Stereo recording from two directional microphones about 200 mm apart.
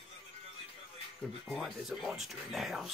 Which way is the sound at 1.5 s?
Centre (ahead or behind).